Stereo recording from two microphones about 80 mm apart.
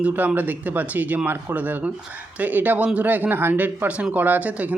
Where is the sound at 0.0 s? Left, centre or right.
Centre.